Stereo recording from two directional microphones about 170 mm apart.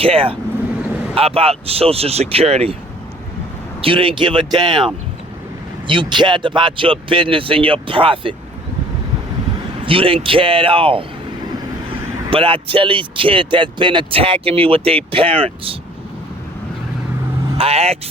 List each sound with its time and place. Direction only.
0.0 s speech: 30° right (ahead or behind)
3.8 s speech: 30° right (ahead or behind)
5.9 s speech: 30° right (ahead or behind)
9.8 s speech: 30° right (ahead or behind)
12.3 s speech: 30° right (ahead or behind)
17.6 s speech: 35° right (ahead or behind)